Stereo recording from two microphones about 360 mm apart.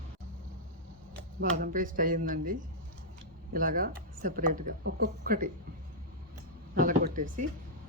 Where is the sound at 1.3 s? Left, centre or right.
Right.